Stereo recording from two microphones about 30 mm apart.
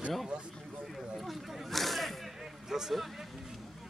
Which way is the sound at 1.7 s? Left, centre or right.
Centre.